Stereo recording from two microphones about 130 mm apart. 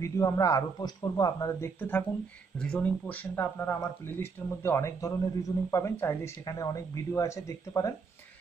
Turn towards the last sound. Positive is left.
turn(degrees=25)  # may be behind; listen again after turning